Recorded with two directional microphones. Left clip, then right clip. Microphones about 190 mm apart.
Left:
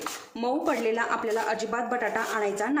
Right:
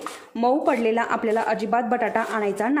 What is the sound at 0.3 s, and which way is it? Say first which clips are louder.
A woman's voice: right 7 dB; 30° right (ahead or behind).